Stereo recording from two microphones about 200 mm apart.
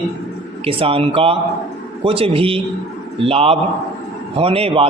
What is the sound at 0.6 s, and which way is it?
Speech, 25° right (ahead or behind).